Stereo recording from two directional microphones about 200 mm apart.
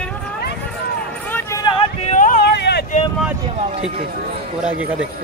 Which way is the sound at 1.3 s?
10° left (ahead or behind).